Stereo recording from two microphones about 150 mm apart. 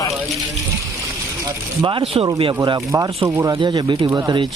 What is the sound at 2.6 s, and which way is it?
Speech, 20° right (ahead or behind).